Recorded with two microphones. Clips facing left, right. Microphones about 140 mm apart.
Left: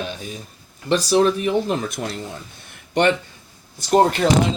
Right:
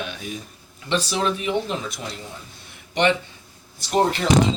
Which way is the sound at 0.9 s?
45° left (ahead or behind).